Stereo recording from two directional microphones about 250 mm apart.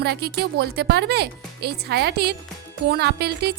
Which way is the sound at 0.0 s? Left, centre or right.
Right.